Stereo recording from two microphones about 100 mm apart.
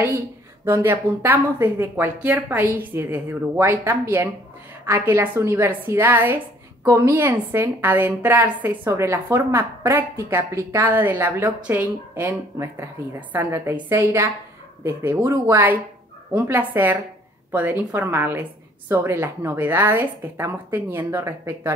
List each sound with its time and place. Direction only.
0.7 s a woman's voice: 25° right (ahead or behind)
16.3 s a woman's voice: 20° right (ahead or behind)